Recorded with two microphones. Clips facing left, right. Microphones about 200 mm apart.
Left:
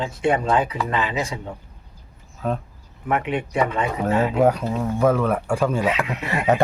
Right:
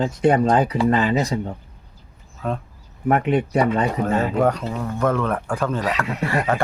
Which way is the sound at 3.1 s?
40° right (ahead or behind).